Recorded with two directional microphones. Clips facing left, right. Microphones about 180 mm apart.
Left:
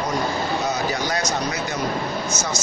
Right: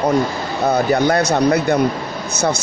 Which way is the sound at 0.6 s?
55° right (ahead or behind).